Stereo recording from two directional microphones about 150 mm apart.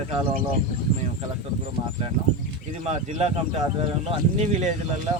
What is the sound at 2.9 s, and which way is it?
Speech, 40° right (ahead or behind).